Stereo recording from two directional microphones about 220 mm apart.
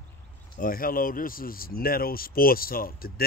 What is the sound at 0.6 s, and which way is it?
Speech, 40° left (ahead or behind).